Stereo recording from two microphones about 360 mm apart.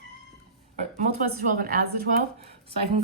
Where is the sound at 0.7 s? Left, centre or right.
Centre.